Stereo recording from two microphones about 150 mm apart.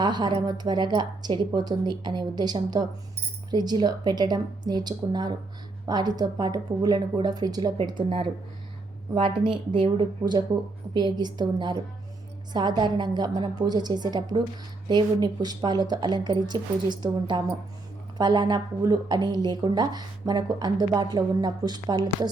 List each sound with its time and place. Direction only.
0.0 s speech: 30° right (ahead or behind)